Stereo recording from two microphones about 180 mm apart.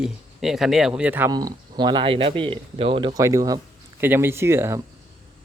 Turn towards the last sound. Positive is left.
turn(degrees=-15)  # may be behind; listen again after turning